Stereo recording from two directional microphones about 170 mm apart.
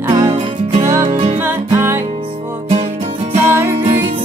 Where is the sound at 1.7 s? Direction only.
15° right (ahead or behind).